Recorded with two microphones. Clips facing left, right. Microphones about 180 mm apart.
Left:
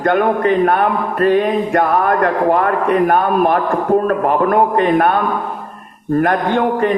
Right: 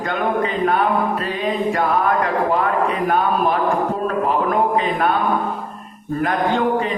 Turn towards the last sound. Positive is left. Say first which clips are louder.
# left 3 dB
turn(degrees=60)  # may be behind; listen again after turning